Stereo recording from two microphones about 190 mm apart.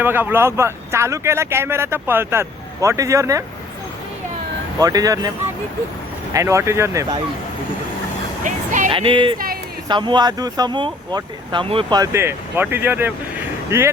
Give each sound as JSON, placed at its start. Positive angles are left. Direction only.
{"t": 0.0, "sound": "speech", "side_deg": -10}
{"t": 4.8, "sound": "speech", "side_deg": -20}
{"t": 6.3, "sound": "speech", "side_deg": -15}
{"t": 8.4, "sound": "speech", "side_deg": -40}
{"t": 8.9, "sound": "speech", "side_deg": -25}